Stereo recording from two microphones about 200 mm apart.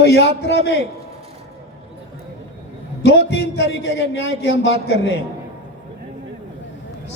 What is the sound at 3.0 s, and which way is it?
A man's voice, 60° left (ahead or behind).